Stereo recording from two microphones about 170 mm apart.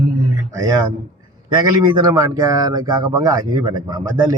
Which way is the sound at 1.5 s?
25° right (ahead or behind).